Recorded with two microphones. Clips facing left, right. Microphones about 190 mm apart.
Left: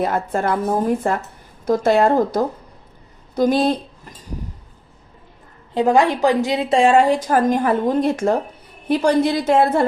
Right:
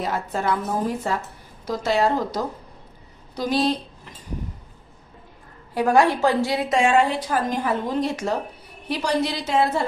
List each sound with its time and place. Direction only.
0.0 s speech: 50° left (ahead or behind)
5.7 s a woman's voice: 20° left (ahead or behind); by 9.8 s 55° left (ahead or behind)